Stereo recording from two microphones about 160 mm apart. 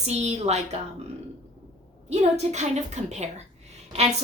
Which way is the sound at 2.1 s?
45° right (ahead or behind).